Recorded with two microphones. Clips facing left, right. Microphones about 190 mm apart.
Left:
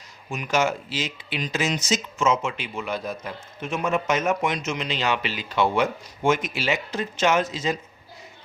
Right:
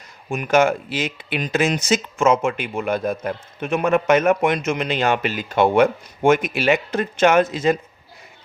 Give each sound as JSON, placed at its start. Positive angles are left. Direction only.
{"t": 0.3, "sound": "speech", "side_deg": -55}